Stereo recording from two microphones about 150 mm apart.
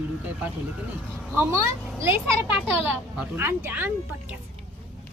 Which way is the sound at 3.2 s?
15° right (ahead or behind).